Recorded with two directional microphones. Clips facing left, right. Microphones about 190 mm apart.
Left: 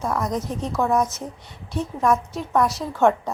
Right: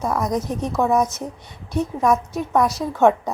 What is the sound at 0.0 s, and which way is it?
A woman's voice, 10° right (ahead or behind).